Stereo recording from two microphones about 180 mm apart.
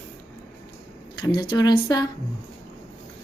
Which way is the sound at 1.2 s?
25° left (ahead or behind).